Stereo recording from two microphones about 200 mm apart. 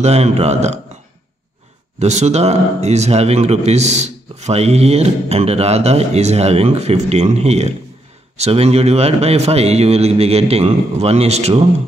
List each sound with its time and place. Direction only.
0.0 s speech: 30° right (ahead or behind)
2.0 s speech: 35° right (ahead or behind)